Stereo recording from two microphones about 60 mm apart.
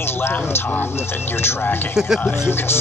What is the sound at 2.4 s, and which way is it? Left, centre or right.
Speech, left.